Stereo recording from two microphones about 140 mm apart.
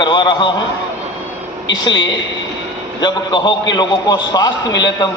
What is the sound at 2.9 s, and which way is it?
A man's voice, 30° left (ahead or behind).